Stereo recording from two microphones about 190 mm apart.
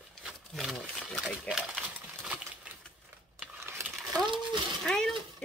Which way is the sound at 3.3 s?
10° right (ahead or behind).